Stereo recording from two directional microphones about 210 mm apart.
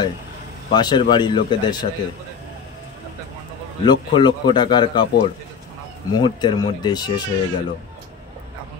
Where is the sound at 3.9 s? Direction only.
20° left (ahead or behind).